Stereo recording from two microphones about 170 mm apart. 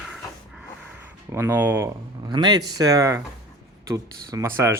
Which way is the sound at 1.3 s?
15° right (ahead or behind).